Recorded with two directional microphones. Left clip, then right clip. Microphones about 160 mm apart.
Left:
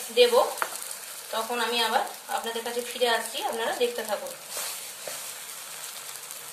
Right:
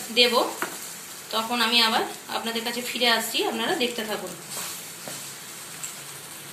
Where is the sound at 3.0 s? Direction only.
60° left (ahead or behind).